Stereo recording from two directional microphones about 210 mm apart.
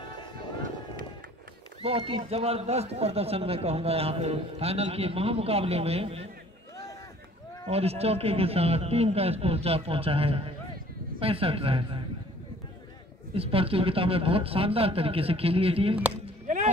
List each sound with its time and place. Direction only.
1.8 s a man's voice: 30° right (ahead or behind)
7.6 s a man's voice: 30° right (ahead or behind)
13.3 s a man's voice: 25° right (ahead or behind)
16.4 s a sound: 35° right (ahead or behind)